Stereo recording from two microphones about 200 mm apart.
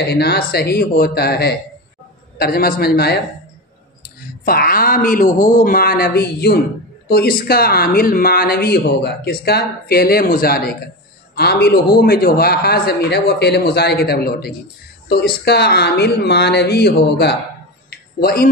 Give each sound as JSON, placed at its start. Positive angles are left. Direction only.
{"t": 0.0, "sound": "speech", "side_deg": 55}
{"t": 4.5, "sound": "a woman's voice", "side_deg": 50}
{"t": 17.8, "sound": "a sound", "side_deg": 50}